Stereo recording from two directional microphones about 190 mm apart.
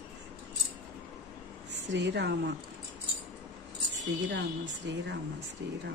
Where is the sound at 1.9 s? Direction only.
65° right (ahead or behind).